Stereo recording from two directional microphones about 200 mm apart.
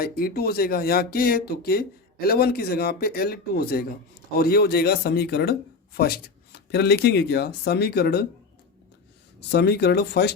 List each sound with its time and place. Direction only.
0.0 s speech: 50° left (ahead or behind)
9.5 s speech: 55° left (ahead or behind)